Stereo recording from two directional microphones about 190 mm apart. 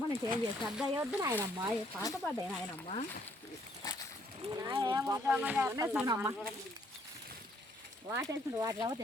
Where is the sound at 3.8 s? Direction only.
20° left (ahead or behind).